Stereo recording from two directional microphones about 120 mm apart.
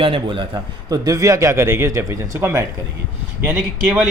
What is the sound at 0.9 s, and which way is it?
A man's voice, 30° right (ahead or behind).